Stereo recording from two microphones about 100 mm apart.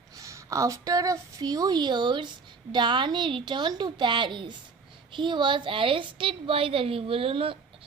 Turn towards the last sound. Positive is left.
turn(degrees=-65)  # may be behind; listen again after turning